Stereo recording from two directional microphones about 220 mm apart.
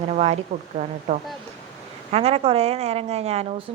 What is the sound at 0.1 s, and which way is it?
A woman's voice, 30° right (ahead or behind).